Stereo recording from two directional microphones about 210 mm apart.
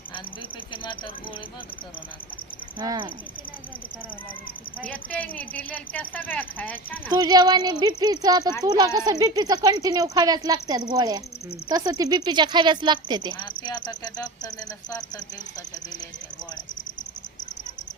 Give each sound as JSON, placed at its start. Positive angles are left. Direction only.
{"t": 2.7, "sound": "speech", "side_deg": -15}
{"t": 4.8, "sound": "speech", "side_deg": 5}
{"t": 7.1, "sound": "speech", "side_deg": -20}
{"t": 13.4, "sound": "cricket", "side_deg": 20}